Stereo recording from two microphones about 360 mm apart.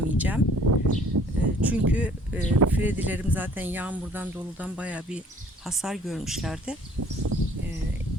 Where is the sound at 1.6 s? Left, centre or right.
Centre.